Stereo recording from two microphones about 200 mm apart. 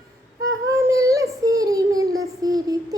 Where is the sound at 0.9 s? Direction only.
15° right (ahead or behind).